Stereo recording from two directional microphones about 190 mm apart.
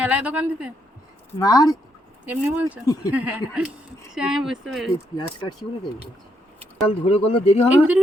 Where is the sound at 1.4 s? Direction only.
20° left (ahead or behind).